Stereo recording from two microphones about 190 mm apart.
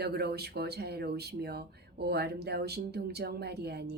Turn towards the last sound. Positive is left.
turn(degrees=-60)  # may be behind; listen again after turning